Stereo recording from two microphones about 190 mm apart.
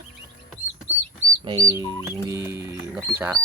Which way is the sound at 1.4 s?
25° right (ahead or behind).